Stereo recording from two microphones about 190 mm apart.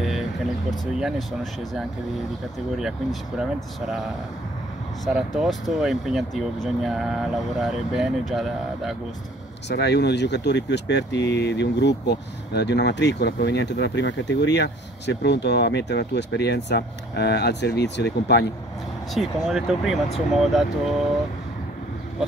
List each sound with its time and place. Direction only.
0.7 s speech: centre (ahead or behind)
5.0 s speech: centre (ahead or behind)
9.7 s speech: 60° left (ahead or behind)
19.1 s speech: centre (ahead or behind)